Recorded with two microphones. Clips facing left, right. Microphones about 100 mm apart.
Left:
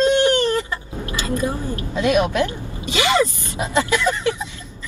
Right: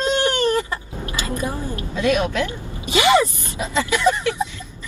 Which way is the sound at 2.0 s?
20° left (ahead or behind).